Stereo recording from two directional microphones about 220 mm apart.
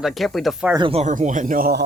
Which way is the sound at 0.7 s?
20° right (ahead or behind).